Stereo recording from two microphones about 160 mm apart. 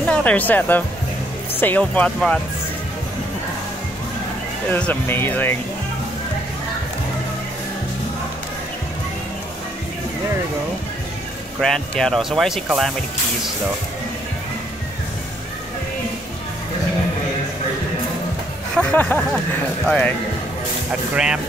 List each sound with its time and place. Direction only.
0.0 s speech: 10° left (ahead or behind)
4.6 s speech: 10° left (ahead or behind)
11.6 s speech: 5° left (ahead or behind)
18.8 s speech: 10° left (ahead or behind)
21.1 s speech: 5° right (ahead or behind)